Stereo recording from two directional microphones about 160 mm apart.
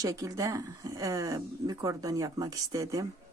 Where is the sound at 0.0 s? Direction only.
20° right (ahead or behind).